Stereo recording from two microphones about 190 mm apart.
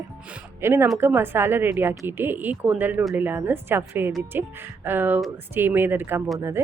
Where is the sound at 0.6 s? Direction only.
15° right (ahead or behind).